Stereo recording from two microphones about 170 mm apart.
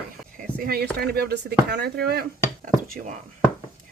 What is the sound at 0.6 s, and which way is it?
Speech, 65° right (ahead or behind).